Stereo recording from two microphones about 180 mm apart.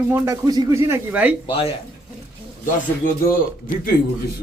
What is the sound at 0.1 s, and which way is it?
Speech, 20° right (ahead or behind).